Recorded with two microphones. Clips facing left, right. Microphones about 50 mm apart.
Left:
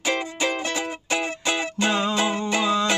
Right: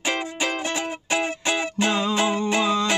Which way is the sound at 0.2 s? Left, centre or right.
Centre.